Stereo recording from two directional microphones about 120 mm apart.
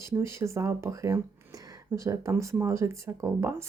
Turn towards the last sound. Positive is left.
turn(degrees=-25)  # may be behind; listen again after turning